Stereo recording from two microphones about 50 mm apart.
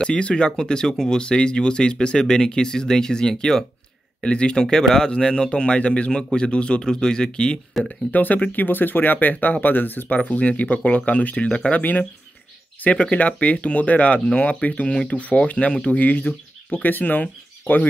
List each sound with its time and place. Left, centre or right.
0.0 s speech: left
7.8 s speech: centre
8.1 s speech: left
12.9 s speech: left